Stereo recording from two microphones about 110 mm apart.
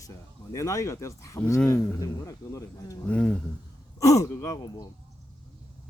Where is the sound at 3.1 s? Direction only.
10° left (ahead or behind).